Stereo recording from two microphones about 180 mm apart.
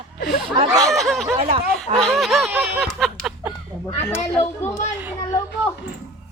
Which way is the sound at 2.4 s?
10° right (ahead or behind).